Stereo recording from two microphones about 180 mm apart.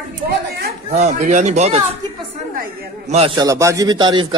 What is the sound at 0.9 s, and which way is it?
Speech, 40° right (ahead or behind).